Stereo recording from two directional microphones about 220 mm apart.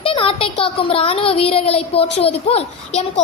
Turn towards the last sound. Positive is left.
turn(degrees=30)  # may be behind; listen again after turning